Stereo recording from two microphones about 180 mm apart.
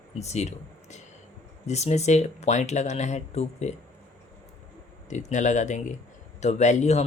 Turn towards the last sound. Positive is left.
turn(degrees=40)  # may be behind; listen again after turning